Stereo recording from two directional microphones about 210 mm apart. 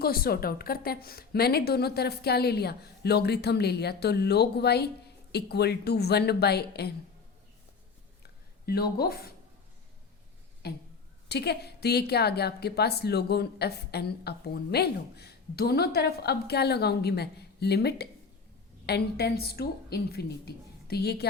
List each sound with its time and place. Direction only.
0.0 s speech: 45° left (ahead or behind)
8.2 s a sound: 50° left (ahead or behind)
10.6 s speech: 50° left (ahead or behind)